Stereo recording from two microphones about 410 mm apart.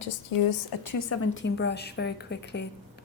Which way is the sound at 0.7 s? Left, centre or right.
Left.